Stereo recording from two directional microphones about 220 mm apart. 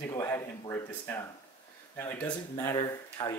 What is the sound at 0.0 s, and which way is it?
Speech, 10° left (ahead or behind).